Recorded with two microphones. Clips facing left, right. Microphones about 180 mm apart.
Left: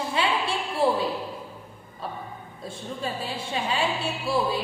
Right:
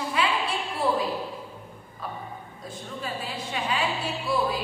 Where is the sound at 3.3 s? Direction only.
30° left (ahead or behind).